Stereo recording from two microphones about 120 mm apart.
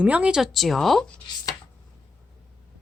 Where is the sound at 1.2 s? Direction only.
35° left (ahead or behind).